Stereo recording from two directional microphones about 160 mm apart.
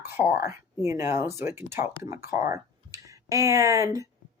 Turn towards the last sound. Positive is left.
turn(degrees=-20)  # may be behind; listen again after turning